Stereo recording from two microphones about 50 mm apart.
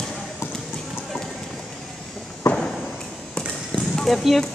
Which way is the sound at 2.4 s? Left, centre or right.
Left.